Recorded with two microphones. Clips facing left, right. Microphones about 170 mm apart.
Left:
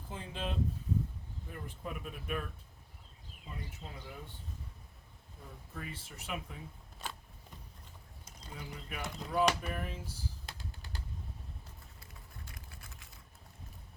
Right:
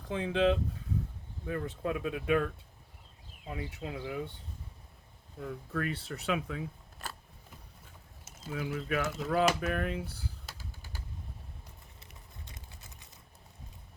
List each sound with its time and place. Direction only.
0.0 s speech: 90° right
1.5 s speech: 80° right
3.5 s speech: 90° right
5.4 s speech: 85° right
8.4 s speech: 90° right; by 10.3 s 60° right (ahead or behind)
11.9 s a sound: 20° right (ahead or behind)